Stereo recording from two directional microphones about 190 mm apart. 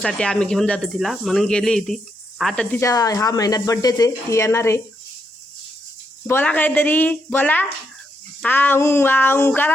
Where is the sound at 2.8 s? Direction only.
20° left (ahead or behind).